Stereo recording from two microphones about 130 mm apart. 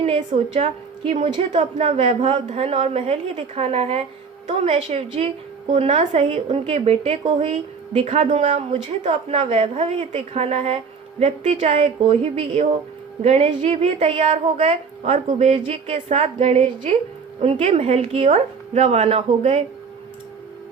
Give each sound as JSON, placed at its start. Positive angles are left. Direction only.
{"t": 0.0, "sound": "a woman's voice", "side_deg": -50}